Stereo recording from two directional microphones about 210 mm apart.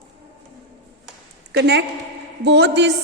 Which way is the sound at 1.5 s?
55° right (ahead or behind).